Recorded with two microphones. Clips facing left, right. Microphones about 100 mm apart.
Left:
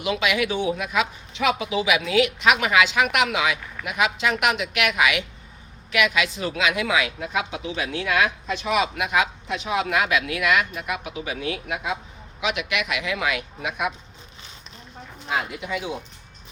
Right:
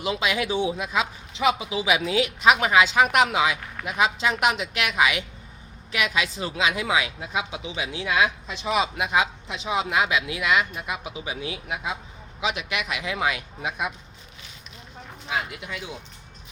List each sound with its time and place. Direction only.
0.0 s a woman's voice: 35° right (ahead or behind)